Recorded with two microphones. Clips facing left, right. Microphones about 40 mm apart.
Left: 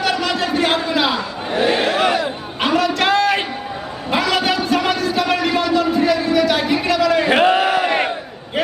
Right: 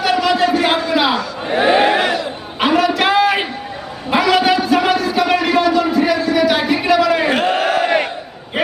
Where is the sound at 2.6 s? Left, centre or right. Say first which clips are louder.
Right 3 dB; centre.